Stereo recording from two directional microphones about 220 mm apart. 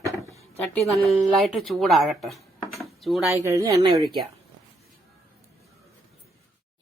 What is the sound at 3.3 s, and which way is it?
Speech, 15° right (ahead or behind).